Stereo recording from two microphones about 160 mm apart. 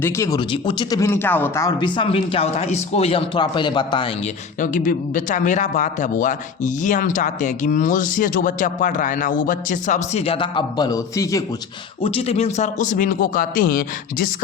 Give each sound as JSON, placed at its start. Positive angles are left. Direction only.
{"t": 0.0, "sound": "speech", "side_deg": 15}
{"t": 0.3, "sound": "speech", "side_deg": 30}
{"t": 1.8, "sound": "speech", "side_deg": 35}
{"t": 4.6, "sound": "speech", "side_deg": 55}
{"t": 12.0, "sound": "speech", "side_deg": 35}